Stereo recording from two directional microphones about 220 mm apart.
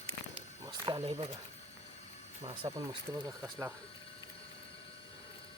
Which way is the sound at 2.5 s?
20° right (ahead or behind).